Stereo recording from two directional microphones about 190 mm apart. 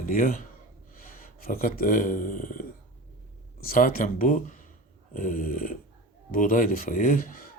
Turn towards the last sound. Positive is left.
turn(degrees=50)  # may be behind; listen again after turning